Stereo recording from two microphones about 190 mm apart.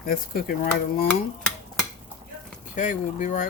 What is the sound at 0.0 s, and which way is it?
Speech, 50° left (ahead or behind).